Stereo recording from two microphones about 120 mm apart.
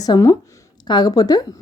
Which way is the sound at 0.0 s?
30° left (ahead or behind).